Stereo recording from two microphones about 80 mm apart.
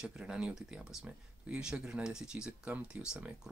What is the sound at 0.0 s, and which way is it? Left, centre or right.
Speech, centre.